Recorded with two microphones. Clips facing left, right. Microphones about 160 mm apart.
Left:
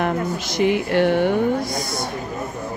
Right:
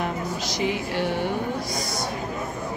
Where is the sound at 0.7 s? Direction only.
60° left (ahead or behind).